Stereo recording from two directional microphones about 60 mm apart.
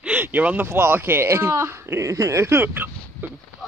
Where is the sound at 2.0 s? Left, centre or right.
Right.